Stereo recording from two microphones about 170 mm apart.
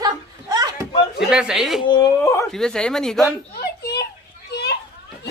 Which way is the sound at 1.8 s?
25° left (ahead or behind).